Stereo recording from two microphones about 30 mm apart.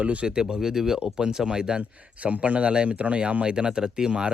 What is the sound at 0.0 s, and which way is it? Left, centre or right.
Speech, right.